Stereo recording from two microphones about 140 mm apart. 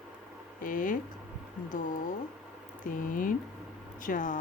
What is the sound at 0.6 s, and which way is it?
Speech, 75° left (ahead or behind).